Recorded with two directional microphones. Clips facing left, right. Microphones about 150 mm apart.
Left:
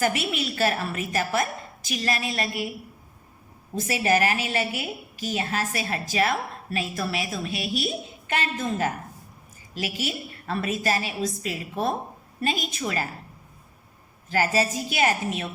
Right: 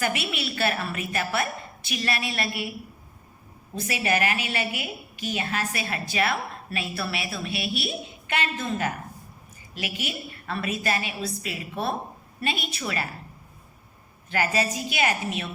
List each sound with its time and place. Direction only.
0.0 s a woman's voice: 40° left (ahead or behind)
3.8 s a woman's voice: 40° left (ahead or behind)
14.3 s a woman's voice: 40° left (ahead or behind)